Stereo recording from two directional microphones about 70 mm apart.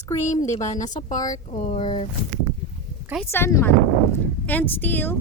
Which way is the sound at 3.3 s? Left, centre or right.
Left.